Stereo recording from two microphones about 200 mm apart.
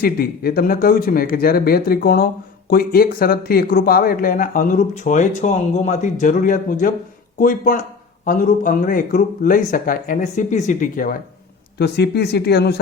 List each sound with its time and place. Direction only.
0.0 s speech: 50° left (ahead or behind)
11.8 s speech: 55° left (ahead or behind)